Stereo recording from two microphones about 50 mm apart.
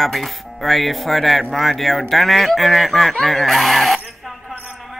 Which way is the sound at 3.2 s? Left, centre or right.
Centre.